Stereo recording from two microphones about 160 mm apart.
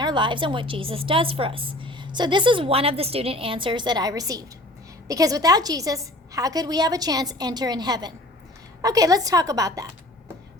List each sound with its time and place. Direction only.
0.0 s a woman's voice: 30° right (ahead or behind)